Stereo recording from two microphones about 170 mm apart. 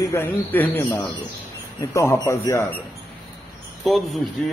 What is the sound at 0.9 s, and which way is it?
Speech, 25° left (ahead or behind).